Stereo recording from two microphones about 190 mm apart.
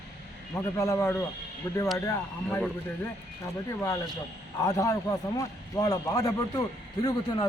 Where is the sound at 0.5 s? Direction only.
15° left (ahead or behind).